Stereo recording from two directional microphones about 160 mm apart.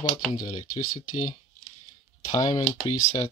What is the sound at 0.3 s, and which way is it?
Speech, 25° left (ahead or behind).